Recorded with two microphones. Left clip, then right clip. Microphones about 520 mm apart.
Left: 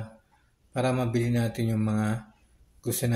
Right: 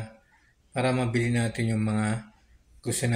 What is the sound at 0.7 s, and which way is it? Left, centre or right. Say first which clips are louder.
Speech: right 1 dB; left.